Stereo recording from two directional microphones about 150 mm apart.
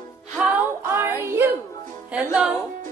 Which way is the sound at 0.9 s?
15° right (ahead or behind).